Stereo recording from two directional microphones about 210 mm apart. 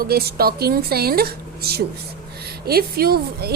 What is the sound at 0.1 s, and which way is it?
A woman's voice, 50° right (ahead or behind).